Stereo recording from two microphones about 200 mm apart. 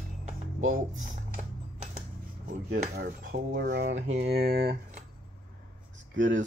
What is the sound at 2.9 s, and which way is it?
Dishes, 50° right (ahead or behind).